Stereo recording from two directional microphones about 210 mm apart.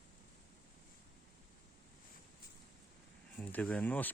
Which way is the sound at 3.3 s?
5° left (ahead or behind).